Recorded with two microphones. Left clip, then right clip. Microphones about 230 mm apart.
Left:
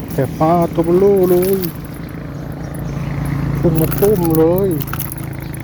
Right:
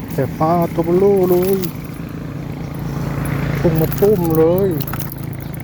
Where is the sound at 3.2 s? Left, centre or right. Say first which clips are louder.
Even; right.